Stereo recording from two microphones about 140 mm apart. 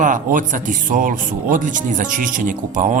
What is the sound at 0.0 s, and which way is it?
Speech, 70° right (ahead or behind).